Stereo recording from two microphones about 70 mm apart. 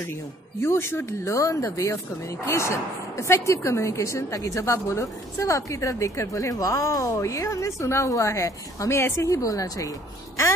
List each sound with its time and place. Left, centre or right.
0.6 s a woman's voice: left